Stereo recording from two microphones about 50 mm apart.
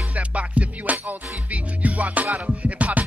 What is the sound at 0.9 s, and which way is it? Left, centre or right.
Music, right.